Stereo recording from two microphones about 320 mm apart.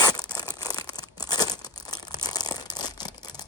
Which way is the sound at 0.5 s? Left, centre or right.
Centre.